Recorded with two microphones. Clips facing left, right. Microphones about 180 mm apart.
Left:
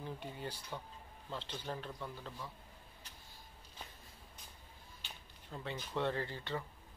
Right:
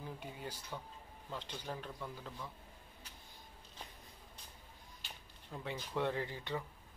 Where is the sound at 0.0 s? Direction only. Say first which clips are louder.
Left 2 dB; 5° right (ahead or behind).